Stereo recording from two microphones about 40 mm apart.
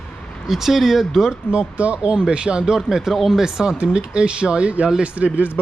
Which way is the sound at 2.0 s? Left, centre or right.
Right.